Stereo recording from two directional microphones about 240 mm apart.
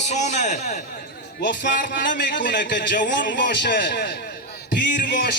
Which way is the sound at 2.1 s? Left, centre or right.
Left.